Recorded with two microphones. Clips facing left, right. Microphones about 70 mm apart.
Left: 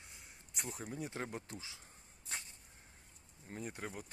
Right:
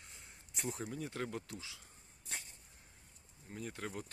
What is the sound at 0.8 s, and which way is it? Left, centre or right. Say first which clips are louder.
Speech: right 1 dB; left.